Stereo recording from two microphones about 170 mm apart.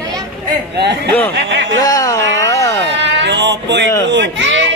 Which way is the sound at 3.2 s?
90° right.